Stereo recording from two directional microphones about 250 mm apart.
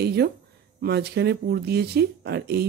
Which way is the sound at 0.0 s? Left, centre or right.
Right.